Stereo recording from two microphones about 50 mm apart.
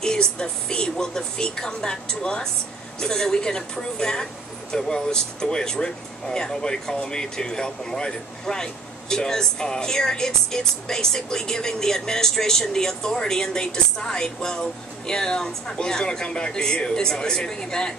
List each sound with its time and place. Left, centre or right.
0.0 s speech: centre